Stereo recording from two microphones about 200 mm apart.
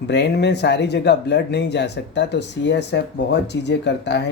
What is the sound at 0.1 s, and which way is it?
Speech, 60° left (ahead or behind).